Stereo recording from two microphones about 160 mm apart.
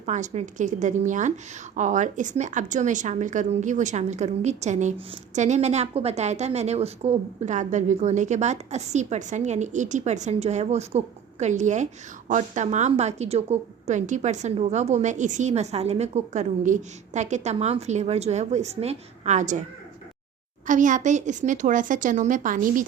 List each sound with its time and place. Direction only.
0.0 s a woman's voice: 45° right (ahead or behind)
20.7 s a woman's voice: 55° right (ahead or behind)